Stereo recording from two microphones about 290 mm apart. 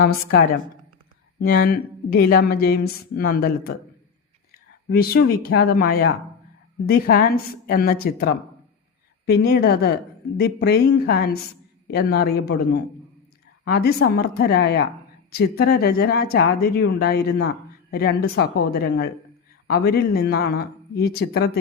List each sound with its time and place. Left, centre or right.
0.0 s a woman's voice: left